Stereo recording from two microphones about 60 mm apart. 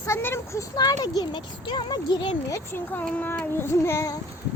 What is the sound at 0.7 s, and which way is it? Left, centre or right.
Speech, left.